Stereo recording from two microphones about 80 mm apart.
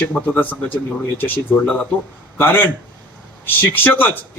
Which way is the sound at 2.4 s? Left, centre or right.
Left.